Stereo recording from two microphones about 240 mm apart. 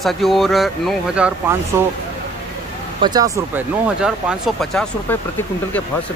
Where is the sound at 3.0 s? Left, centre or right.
Centre.